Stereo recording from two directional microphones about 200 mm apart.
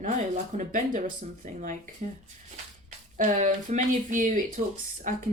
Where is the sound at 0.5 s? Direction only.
40° right (ahead or behind).